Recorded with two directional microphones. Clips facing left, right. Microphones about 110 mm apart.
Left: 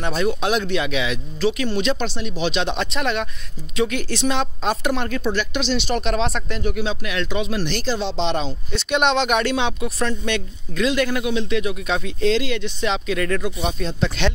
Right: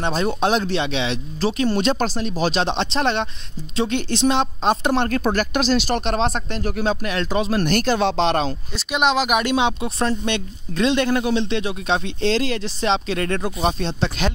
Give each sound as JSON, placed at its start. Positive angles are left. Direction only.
{"t": 0.0, "sound": "speech", "side_deg": -30}
{"t": 5.1, "sound": "speech", "side_deg": -45}
{"t": 8.7, "sound": "speech", "side_deg": -5}